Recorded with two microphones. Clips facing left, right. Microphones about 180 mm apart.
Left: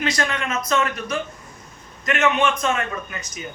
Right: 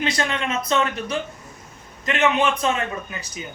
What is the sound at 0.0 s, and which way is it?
A man's voice, 25° right (ahead or behind).